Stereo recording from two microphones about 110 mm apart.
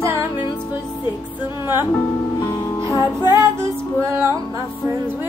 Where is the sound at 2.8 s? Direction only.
35° left (ahead or behind).